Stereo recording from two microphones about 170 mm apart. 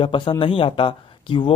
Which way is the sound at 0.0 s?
30° left (ahead or behind).